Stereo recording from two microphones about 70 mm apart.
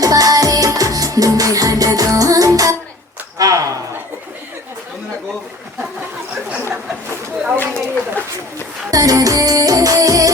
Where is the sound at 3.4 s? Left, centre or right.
Right.